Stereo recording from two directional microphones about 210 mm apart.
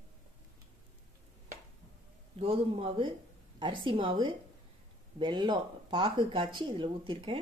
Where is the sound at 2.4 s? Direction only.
25° right (ahead or behind).